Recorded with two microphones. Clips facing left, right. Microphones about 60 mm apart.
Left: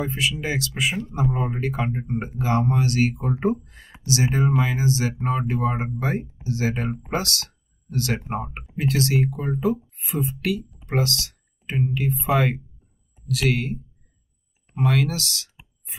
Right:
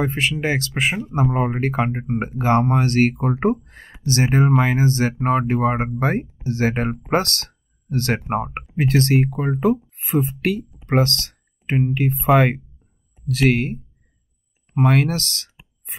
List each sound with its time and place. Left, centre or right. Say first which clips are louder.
0.0 s speech: right 4 dB; right
14.9 s speech: right 3 dB; right